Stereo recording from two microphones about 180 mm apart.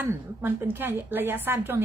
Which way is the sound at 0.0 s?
15° right (ahead or behind).